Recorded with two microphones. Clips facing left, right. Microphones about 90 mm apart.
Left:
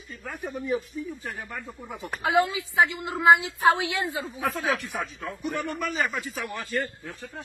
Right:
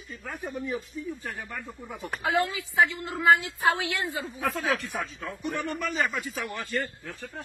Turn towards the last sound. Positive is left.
turn(degrees=5)  # may be behind; listen again after turning